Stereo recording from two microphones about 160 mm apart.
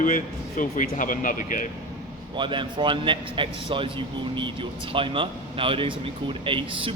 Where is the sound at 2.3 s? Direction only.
30° right (ahead or behind).